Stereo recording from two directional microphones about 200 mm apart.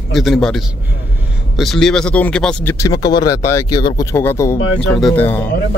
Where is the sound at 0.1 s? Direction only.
Centre (ahead or behind).